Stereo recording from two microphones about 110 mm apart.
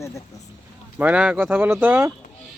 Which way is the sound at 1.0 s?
10° right (ahead or behind).